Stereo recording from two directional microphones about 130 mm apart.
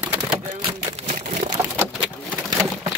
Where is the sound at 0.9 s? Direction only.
65° right (ahead or behind).